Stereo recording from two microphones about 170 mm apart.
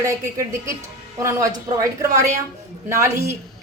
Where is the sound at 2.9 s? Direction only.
15° right (ahead or behind).